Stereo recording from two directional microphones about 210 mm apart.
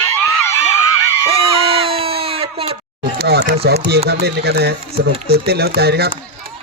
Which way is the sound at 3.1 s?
50° right (ahead or behind).